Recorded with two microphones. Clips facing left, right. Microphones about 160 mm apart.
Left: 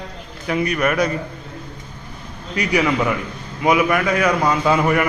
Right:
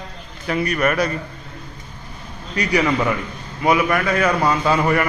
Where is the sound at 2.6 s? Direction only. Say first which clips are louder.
Even; 10° left (ahead or behind).